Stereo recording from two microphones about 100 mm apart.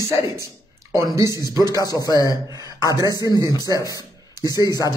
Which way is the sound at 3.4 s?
40° left (ahead or behind).